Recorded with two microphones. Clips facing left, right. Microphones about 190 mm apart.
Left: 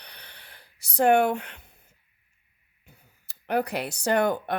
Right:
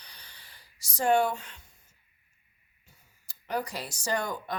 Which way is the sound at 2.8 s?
60° left (ahead or behind).